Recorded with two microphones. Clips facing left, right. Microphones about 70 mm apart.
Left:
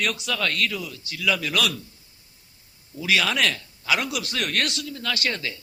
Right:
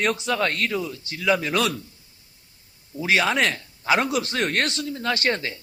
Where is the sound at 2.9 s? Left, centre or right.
Right.